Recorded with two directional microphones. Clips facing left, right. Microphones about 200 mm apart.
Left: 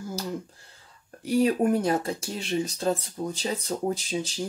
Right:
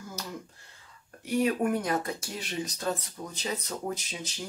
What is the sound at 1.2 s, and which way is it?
Speech, 30° left (ahead or behind).